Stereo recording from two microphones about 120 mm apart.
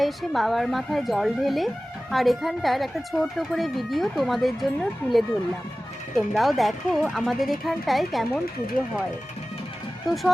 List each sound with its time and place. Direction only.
0.0 s speech: centre (ahead or behind)